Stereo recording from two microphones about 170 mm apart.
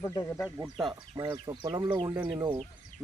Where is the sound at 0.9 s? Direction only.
30° right (ahead or behind).